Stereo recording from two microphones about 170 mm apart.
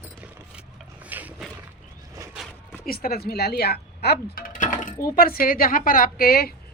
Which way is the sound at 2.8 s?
60° left (ahead or behind).